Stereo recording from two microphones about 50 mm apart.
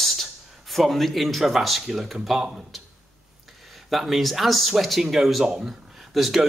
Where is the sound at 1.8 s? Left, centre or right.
Centre.